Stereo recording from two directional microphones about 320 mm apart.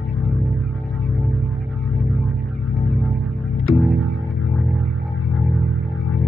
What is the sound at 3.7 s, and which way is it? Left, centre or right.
Music, left.